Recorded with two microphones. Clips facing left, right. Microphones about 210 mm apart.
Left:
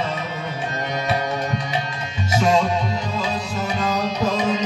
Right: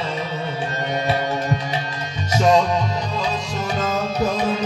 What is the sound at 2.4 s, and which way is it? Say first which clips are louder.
Music: right 3 dB; 40° right (ahead or behind).